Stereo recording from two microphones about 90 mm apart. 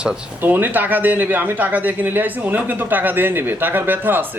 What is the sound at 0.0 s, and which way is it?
Speech, 20° right (ahead or behind).